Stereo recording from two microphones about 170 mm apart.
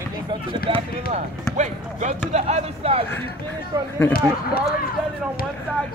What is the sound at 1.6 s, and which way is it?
Speech, 45° right (ahead or behind).